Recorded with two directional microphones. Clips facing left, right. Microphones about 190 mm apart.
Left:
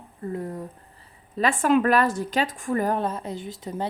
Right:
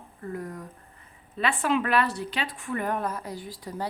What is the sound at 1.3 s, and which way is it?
A woman's voice, 45° left (ahead or behind).